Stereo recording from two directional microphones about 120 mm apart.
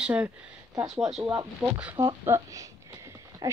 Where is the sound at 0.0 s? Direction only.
10° right (ahead or behind).